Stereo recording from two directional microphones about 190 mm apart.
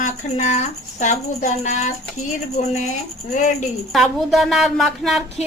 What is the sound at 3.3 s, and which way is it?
Speech, 40° left (ahead or behind).